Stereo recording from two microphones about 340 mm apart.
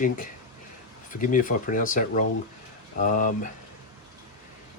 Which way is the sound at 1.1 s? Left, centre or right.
Left.